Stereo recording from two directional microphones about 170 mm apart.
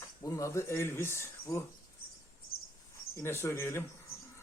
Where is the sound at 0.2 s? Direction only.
20° left (ahead or behind).